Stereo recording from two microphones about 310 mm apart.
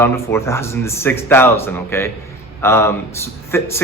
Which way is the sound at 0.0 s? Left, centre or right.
Centre.